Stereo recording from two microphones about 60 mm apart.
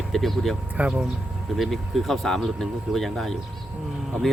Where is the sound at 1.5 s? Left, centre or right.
Centre.